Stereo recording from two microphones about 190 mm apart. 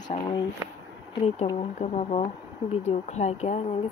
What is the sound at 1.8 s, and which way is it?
Speech, 35° left (ahead or behind).